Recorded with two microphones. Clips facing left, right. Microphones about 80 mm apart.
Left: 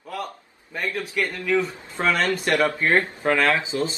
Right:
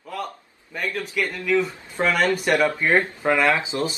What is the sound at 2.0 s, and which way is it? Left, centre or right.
A man's voice, centre.